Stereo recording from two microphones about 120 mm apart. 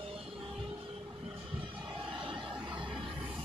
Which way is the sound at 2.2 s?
40° right (ahead or behind).